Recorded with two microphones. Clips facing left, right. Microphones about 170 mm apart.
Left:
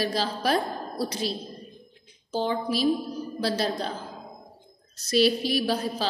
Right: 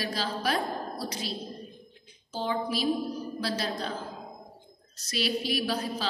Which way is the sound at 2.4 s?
30° left (ahead or behind).